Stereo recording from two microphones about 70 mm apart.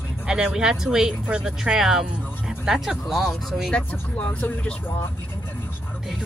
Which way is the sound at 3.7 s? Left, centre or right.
Centre.